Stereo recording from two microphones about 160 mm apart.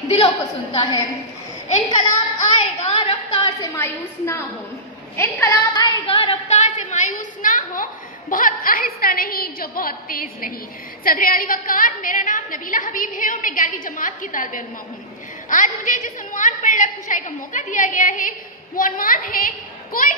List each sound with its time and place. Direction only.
0.1 s a woman's voice: 30° left (ahead or behind)
2.8 s a sound: 40° left (ahead or behind)
3.7 s a woman's voice: 15° left (ahead or behind)
6.0 s a woman's voice: 35° left (ahead or behind)
6.8 s a woman's voice: 50° left (ahead or behind)